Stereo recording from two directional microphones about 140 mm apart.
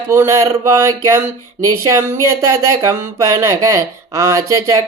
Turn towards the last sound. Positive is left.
turn(degrees=-25)  # may be behind; listen again after turning